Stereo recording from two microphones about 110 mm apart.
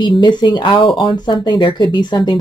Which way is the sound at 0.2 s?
45° left (ahead or behind).